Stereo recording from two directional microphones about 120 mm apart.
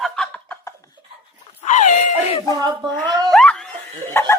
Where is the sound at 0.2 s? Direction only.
10° left (ahead or behind).